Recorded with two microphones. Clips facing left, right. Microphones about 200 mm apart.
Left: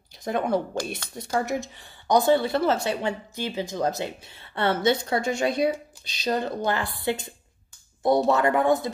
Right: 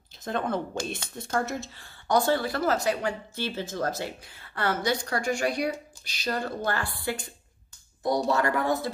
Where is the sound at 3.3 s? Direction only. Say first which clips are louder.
Left 2 dB; 15° left (ahead or behind).